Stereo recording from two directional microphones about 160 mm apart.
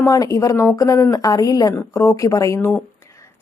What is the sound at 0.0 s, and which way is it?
A woman's voice, 20° left (ahead or behind).